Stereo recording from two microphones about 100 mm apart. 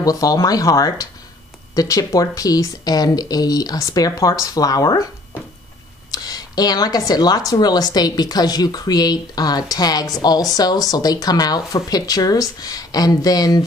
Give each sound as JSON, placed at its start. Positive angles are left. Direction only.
{"t": 0.0, "sound": "speech", "side_deg": 35}
{"t": 6.1, "sound": "speech", "side_deg": 40}